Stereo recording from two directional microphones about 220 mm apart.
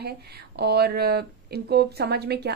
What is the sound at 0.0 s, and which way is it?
Speech, 45° right (ahead or behind).